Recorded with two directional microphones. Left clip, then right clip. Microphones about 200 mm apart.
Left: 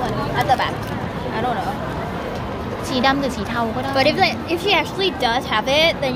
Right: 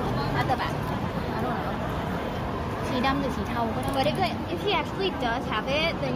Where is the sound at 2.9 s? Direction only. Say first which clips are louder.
Left 9 dB; 15° left (ahead or behind).